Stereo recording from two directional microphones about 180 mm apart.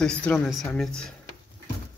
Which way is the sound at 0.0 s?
5° left (ahead or behind).